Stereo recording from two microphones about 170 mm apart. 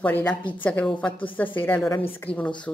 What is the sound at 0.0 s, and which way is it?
Speech, 10° left (ahead or behind).